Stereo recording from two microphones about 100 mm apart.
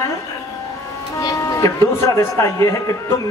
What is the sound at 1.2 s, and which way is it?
Speech, 35° left (ahead or behind).